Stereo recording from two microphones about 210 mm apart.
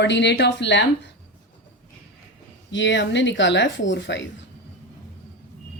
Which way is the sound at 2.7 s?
60° left (ahead or behind).